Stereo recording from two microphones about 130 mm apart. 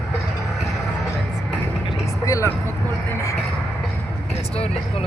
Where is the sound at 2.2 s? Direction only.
25° left (ahead or behind).